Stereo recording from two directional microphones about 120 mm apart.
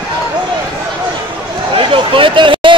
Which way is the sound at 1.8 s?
45° right (ahead or behind).